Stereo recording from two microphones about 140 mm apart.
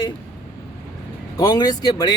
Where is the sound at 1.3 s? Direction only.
30° left (ahead or behind).